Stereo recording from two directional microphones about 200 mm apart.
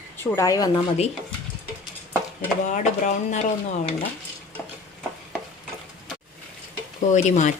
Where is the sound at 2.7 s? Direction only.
35° left (ahead or behind).